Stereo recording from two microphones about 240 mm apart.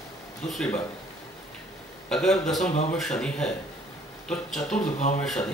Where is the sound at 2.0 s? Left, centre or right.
Centre.